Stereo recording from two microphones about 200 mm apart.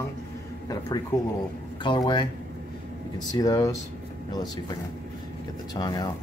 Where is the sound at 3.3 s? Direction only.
15° left (ahead or behind).